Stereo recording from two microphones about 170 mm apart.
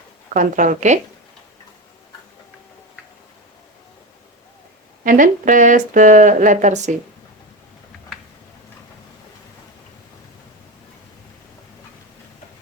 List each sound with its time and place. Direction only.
0.3 s speech: 50° right (ahead or behind)
5.0 s speech: 50° right (ahead or behind)